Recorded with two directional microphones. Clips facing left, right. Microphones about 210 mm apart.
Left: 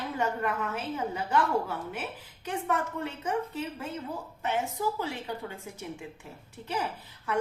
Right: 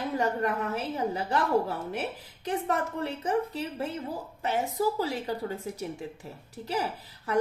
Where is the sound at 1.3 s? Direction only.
35° right (ahead or behind).